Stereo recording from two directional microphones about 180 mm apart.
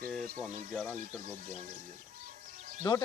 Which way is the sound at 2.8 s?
25° left (ahead or behind).